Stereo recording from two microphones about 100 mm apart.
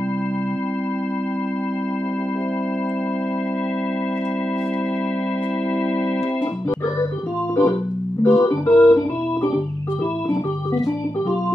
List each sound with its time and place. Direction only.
8.3 s organ: 15° left (ahead or behind)